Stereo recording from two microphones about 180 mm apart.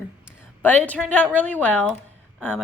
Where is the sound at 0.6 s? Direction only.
10° left (ahead or behind).